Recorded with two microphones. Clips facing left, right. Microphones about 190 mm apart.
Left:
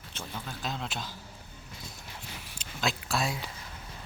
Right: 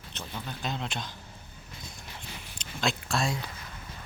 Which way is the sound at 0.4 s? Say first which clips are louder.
Right 2 dB; centre (ahead or behind).